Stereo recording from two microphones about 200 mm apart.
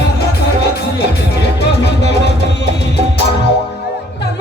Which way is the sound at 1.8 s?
60° left (ahead or behind).